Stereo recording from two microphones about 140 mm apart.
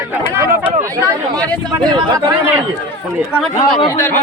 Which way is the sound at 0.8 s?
25° right (ahead or behind).